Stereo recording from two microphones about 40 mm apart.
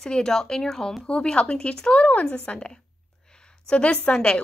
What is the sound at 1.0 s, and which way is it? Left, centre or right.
Speech, left.